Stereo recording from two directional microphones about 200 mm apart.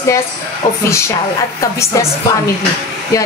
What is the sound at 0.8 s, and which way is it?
A woman's voice, 15° left (ahead or behind).